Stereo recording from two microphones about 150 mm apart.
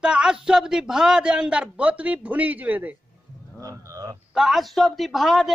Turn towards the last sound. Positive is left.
turn(degrees=0)  # may be behind; listen again after turning